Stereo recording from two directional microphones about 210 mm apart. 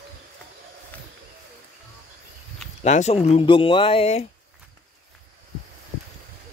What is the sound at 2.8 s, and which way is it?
Speech, 30° left (ahead or behind).